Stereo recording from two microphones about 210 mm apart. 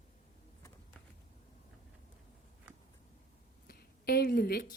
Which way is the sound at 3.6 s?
45° left (ahead or behind).